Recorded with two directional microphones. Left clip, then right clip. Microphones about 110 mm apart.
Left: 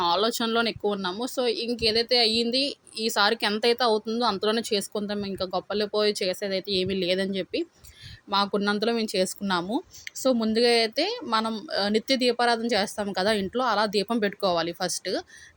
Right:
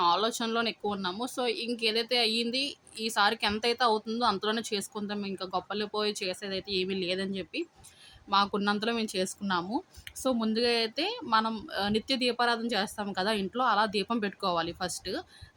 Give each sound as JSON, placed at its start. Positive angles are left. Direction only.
{"t": 0.0, "sound": "speech", "side_deg": 35}
{"t": 0.9, "sound": "speech", "side_deg": 30}
{"t": 8.3, "sound": "speech", "side_deg": 30}
{"t": 10.2, "sound": "speech", "side_deg": 25}